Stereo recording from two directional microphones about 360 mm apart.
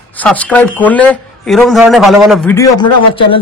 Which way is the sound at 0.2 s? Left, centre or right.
Centre.